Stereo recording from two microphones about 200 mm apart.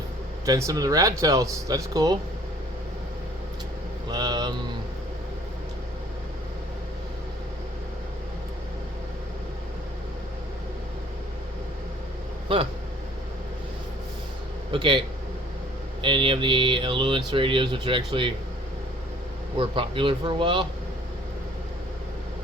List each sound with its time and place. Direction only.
0.4 s speech: 20° right (ahead or behind)
4.1 s speech: 20° right (ahead or behind)
14.7 s speech: 25° right (ahead or behind)
19.5 s speech: 25° right (ahead or behind)